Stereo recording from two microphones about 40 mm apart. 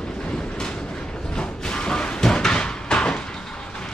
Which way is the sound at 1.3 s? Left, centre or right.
Centre.